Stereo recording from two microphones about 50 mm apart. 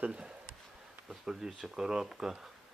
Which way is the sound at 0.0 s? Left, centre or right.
Right.